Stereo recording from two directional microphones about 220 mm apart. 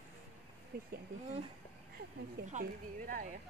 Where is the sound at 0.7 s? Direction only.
45° right (ahead or behind).